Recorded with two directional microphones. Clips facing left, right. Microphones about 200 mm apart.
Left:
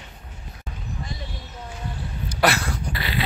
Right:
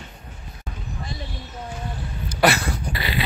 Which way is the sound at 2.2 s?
Centre (ahead or behind).